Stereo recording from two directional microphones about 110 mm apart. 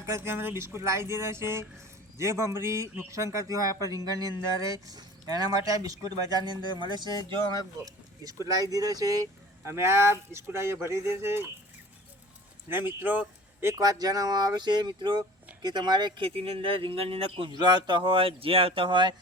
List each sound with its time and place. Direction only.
0.0 s speech: 25° right (ahead or behind)
9.6 s speech: 25° right (ahead or behind)
12.6 s speech: 20° right (ahead or behind); by 19.1 s 45° right (ahead or behind)